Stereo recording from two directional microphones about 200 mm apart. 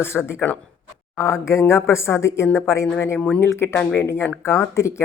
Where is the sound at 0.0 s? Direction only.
10° left (ahead or behind).